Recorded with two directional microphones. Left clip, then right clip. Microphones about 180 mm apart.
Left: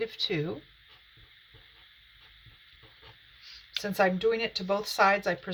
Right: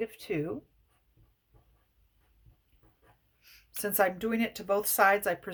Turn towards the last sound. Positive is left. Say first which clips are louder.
# left 1 dB
turn(degrees=-55)  # may be behind; listen again after turning